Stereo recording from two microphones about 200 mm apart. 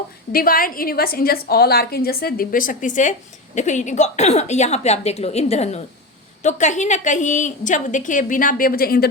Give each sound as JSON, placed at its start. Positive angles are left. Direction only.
{"t": 0.3, "sound": "a woman's voice", "side_deg": 45}